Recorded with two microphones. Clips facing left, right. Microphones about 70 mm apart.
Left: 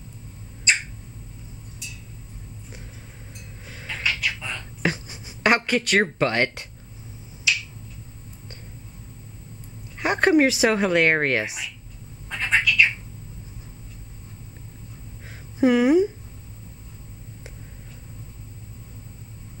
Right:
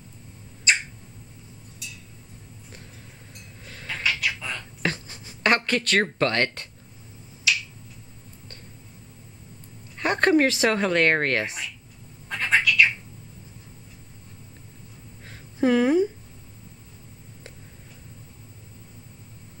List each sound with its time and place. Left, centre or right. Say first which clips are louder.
0.7 s rodents: even; centre
3.6 s a sound: even; centre
7.5 s finger snapping: even; centre
9.9 s speech: left 2 dB; centre
12.3 s cat: even; centre
15.6 s a sound: left 2 dB; centre